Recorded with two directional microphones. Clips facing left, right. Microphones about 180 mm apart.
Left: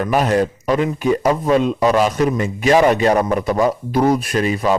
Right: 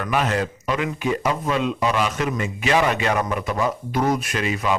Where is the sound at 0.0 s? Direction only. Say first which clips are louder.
Left 6 dB; 40° left (ahead or behind).